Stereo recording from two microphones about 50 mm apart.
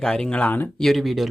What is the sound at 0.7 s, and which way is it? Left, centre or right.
Speech, centre.